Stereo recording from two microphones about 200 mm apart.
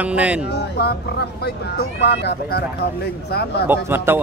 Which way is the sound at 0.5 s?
55° left (ahead or behind).